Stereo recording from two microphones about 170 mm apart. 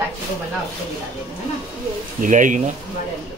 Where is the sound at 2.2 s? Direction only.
50° right (ahead or behind).